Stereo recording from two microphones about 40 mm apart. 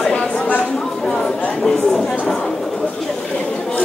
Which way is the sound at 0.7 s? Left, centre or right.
Centre.